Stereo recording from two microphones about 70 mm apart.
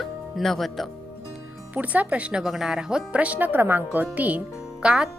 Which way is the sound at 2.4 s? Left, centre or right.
Centre.